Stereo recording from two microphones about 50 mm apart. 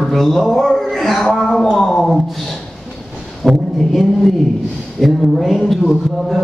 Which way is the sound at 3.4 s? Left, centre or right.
Centre.